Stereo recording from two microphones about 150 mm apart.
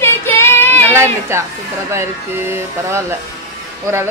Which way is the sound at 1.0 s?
15° right (ahead or behind).